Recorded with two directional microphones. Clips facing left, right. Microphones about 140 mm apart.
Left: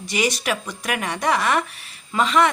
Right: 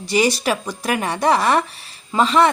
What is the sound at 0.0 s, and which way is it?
A woman's voice, 35° right (ahead or behind).